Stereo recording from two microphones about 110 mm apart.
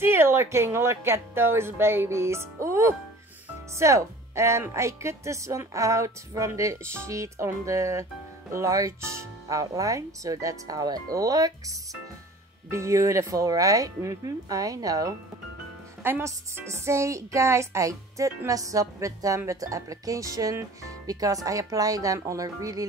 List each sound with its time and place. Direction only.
0.0 s speech: 20° right (ahead or behind)
16.0 s speech: 20° right (ahead or behind)